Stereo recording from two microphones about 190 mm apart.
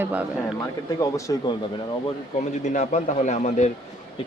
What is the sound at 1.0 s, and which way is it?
Speech, 15° left (ahead or behind).